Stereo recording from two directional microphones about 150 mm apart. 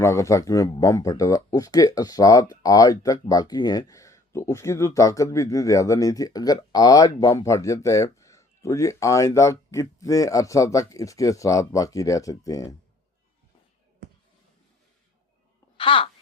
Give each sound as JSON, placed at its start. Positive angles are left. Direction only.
{"t": 0.0, "sound": "speech", "side_deg": 20}
{"t": 15.8, "sound": "speech", "side_deg": 35}